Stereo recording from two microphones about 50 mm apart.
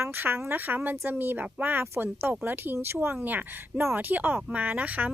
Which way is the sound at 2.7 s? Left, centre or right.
Right.